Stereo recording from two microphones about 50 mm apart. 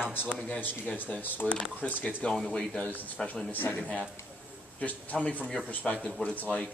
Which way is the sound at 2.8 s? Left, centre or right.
Left.